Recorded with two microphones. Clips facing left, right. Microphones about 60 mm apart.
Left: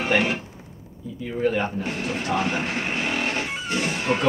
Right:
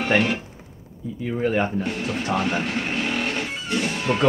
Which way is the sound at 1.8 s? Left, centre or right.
Centre.